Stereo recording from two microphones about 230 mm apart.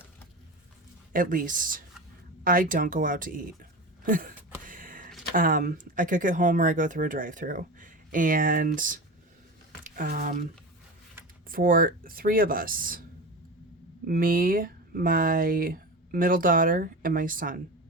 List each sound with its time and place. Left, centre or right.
1.1 s speech: right
4.6 s a sound: right
5.3 s speech: right
11.4 s speech: right
14.1 s speech: right